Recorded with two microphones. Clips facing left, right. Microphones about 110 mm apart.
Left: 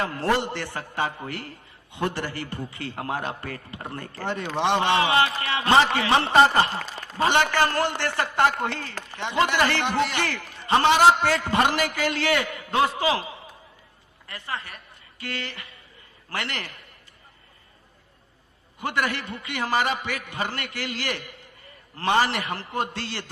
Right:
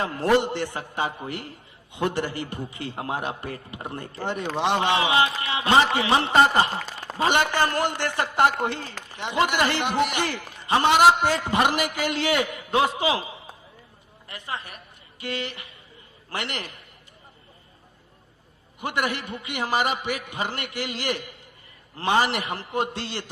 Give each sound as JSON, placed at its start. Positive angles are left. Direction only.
{"t": 0.0, "sound": "a man's voice", "side_deg": -20}
{"t": 18.8, "sound": "a man's voice", "side_deg": -20}